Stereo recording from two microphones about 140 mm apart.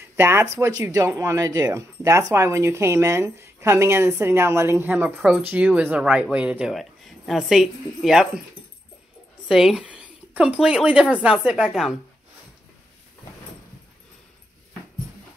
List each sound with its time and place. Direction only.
0.1 s speech: 20° right (ahead or behind)
9.5 s speech: 5° right (ahead or behind)